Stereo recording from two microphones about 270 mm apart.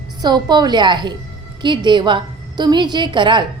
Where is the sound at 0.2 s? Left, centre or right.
Centre.